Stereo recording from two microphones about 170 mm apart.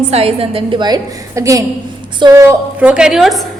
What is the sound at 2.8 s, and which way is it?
Speech, 5° right (ahead or behind).